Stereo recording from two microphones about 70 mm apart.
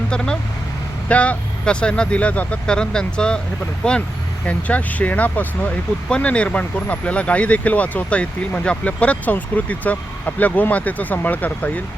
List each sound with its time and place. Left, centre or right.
1.0 s speech: centre